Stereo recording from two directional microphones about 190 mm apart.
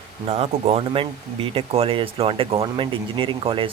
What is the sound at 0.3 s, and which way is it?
Speech, 30° right (ahead or behind).